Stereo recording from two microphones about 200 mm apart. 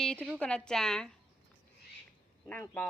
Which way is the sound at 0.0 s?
5° left (ahead or behind).